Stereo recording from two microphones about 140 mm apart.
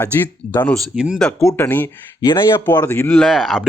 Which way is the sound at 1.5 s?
15° left (ahead or behind).